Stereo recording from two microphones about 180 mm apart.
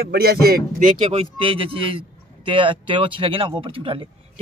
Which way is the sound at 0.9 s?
30° right (ahead or behind).